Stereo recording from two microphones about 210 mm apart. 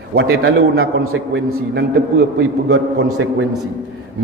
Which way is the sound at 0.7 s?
80° right.